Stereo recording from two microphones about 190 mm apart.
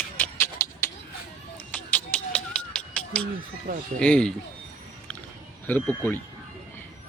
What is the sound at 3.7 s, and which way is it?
Speech, 45° right (ahead or behind).